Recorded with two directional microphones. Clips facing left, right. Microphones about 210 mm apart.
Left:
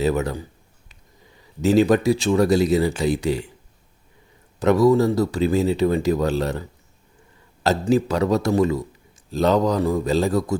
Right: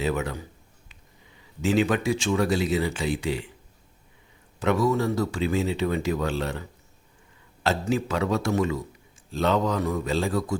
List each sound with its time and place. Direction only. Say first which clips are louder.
0.0 s speech: left 6 dB; 40° left (ahead or behind)
1.6 s speech: left 6 dB; 40° left (ahead or behind)
4.6 s speech: left 7 dB; 40° left (ahead or behind)